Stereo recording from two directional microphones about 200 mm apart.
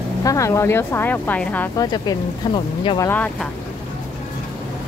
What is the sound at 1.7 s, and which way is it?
Speech, 20° left (ahead or behind).